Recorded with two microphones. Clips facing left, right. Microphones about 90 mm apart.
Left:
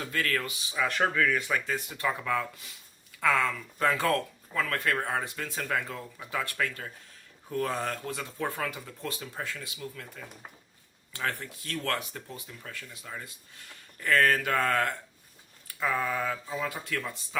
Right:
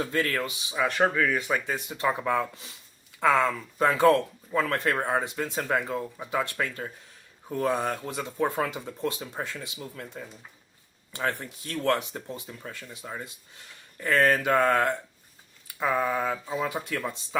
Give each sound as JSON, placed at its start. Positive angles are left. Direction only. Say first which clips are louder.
{"t": 0.0, "sound": "speech", "louder": "right 3 dB", "side_deg": -25}